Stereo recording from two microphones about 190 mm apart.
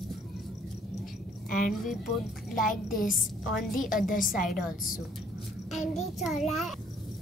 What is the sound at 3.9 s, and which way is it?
Speech, 45° left (ahead or behind).